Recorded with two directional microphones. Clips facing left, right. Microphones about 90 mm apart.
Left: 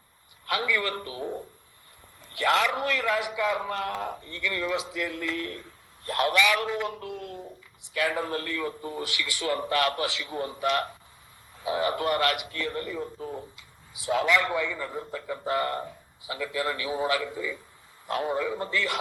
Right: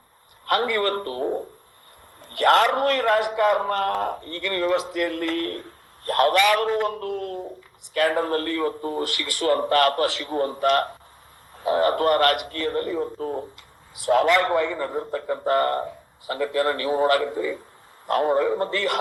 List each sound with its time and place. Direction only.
0.4 s a man's voice: 50° right (ahead or behind)